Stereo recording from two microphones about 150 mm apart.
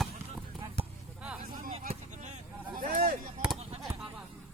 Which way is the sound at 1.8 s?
60° right (ahead or behind).